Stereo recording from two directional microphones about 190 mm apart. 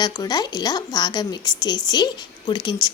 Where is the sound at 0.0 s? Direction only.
20° left (ahead or behind).